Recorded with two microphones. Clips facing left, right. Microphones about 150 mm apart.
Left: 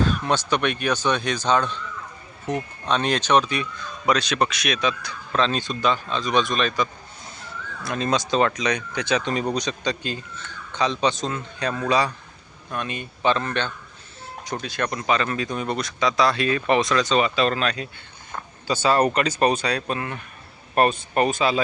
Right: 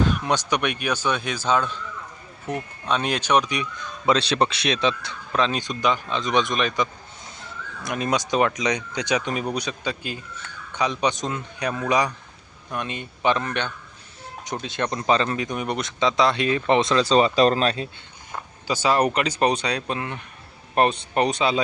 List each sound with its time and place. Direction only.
0.0 s speech: 15° right (ahead or behind)
2.8 s speech: 10° right (ahead or behind)
4.1 s speech: 30° right (ahead or behind)
5.3 s speech: 15° right (ahead or behind); by 17.8 s 30° right (ahead or behind)
18.3 s speech: 10° right (ahead or behind)